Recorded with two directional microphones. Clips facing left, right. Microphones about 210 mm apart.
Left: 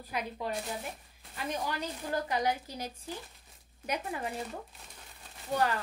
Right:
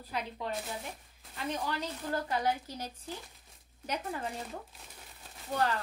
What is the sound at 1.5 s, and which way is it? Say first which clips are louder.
Speech: even; 10° left (ahead or behind).